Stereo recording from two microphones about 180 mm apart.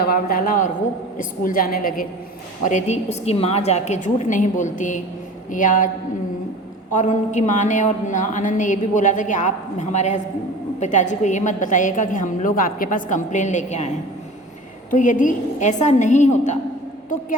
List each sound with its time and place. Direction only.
0.0 s a woman's voice: 55° left (ahead or behind)
2.6 s a woman's voice: 40° left (ahead or behind)
6.9 s a woman's voice: 45° left (ahead or behind)